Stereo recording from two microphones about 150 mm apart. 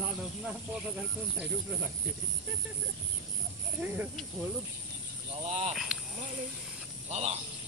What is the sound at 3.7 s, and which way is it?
Speech, 10° right (ahead or behind).